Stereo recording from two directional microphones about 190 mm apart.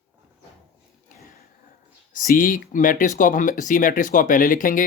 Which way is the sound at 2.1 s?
45° left (ahead or behind).